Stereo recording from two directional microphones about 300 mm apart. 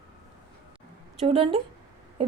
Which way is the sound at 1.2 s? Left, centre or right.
Centre.